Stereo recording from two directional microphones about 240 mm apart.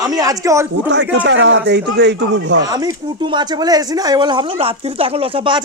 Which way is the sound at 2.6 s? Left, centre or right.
Centre.